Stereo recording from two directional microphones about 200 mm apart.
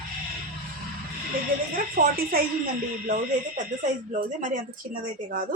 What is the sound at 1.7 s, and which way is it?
Speech, 45° right (ahead or behind).